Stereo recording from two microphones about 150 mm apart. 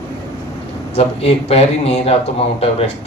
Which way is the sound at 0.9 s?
45° left (ahead or behind).